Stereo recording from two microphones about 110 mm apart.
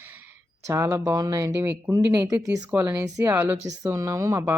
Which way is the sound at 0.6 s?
25° right (ahead or behind).